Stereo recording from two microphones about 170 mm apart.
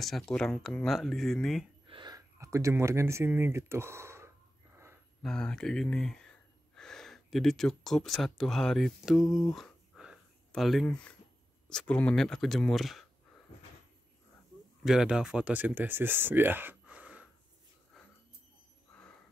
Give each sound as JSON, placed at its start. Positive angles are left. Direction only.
{"t": 0.0, "sound": "speech", "side_deg": 0}
{"t": 1.9, "sound": "speech", "side_deg": -25}
{"t": 5.2, "sound": "speech", "side_deg": 5}
{"t": 9.5, "sound": "a sound", "side_deg": 0}
{"t": 11.7, "sound": "speech", "side_deg": 5}
{"t": 14.9, "sound": "speech", "side_deg": -5}